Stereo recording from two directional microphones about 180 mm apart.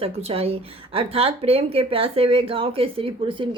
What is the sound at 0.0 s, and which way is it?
Speech, 35° right (ahead or behind).